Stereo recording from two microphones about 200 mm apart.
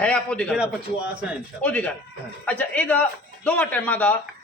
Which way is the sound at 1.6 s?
5° left (ahead or behind).